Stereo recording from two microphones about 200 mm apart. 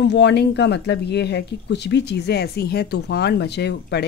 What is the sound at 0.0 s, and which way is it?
Speech, 60° left (ahead or behind).